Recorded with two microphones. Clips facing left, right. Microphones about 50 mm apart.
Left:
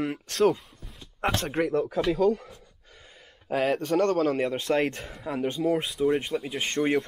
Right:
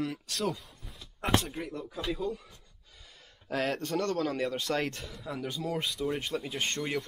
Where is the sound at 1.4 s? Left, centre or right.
Left.